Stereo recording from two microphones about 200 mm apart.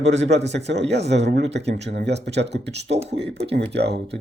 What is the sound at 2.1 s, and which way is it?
Speech, 60° right (ahead or behind).